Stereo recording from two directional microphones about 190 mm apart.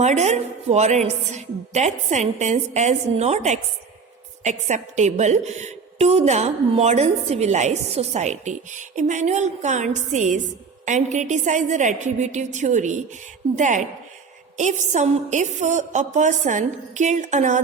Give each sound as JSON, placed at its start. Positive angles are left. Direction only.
{"t": 0.0, "sound": "a woman's voice", "side_deg": -35}